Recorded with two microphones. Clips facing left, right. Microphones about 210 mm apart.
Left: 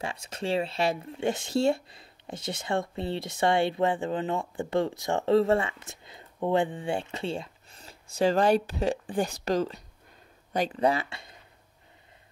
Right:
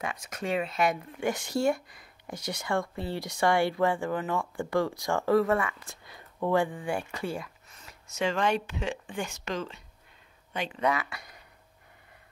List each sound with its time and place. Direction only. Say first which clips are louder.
0.0 s speech: left 1 dB; 30° left (ahead or behind)